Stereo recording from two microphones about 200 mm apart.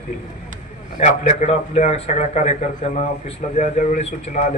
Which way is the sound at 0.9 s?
40° left (ahead or behind).